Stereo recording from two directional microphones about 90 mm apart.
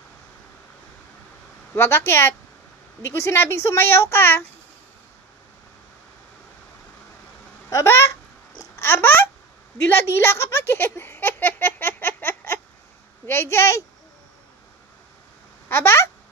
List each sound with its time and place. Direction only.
1.8 s speech: 25° left (ahead or behind)
7.7 s speech: 30° left (ahead or behind)
9.8 s a sound: 25° left (ahead or behind)
13.3 s speech: 30° left (ahead or behind)
15.7 s speech: 25° left (ahead or behind)